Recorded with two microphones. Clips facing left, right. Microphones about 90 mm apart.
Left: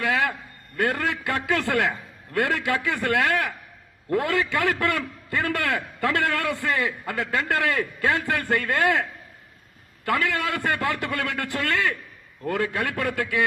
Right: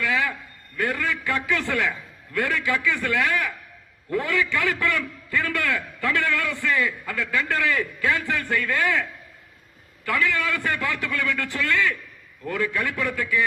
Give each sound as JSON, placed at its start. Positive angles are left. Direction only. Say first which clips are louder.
{"t": 0.0, "sound": "a sound", "louder": "left 1 dB", "side_deg": 60}
{"t": 0.8, "sound": "a man's voice", "louder": "left 1 dB", "side_deg": 65}
{"t": 10.1, "sound": "a man's voice", "louder": "even", "side_deg": 55}